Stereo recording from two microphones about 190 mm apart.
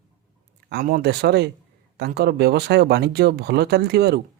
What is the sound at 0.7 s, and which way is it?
Speech, 55° right (ahead or behind).